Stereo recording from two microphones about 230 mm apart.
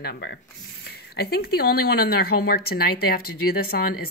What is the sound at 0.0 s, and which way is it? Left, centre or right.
A woman's voice, left.